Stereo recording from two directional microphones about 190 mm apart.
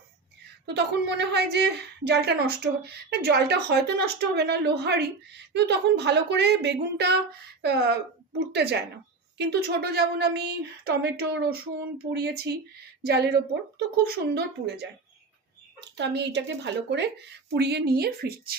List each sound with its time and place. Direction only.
0.6 s a woman's voice: 60° right (ahead or behind)